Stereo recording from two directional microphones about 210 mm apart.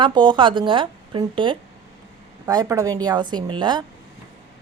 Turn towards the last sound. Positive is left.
turn(degrees=-20)  # may be behind; listen again after turning